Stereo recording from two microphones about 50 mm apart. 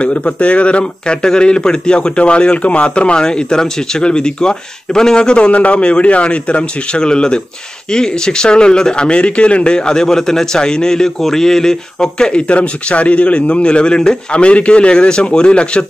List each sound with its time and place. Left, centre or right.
0.0 s speech: left